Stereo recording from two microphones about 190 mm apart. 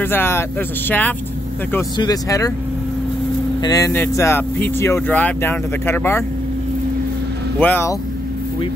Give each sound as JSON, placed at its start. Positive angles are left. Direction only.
{"t": 0.0, "sound": "speech", "side_deg": 10}
{"t": 3.6, "sound": "speech", "side_deg": 15}
{"t": 7.6, "sound": "speech", "side_deg": 10}